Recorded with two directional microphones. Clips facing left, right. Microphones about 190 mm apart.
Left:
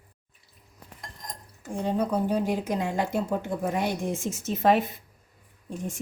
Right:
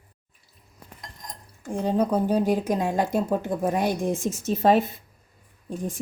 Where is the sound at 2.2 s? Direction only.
35° right (ahead or behind).